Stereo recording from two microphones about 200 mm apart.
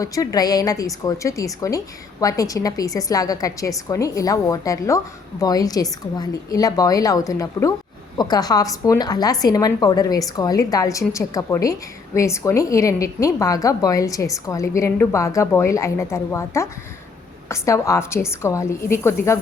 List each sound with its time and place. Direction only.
0.0 s a woman's voice: 15° left (ahead or behind)